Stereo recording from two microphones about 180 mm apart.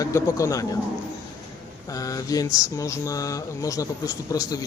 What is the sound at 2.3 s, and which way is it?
Speech, 20° left (ahead or behind).